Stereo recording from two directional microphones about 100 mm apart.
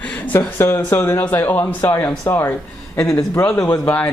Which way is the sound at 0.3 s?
25° left (ahead or behind).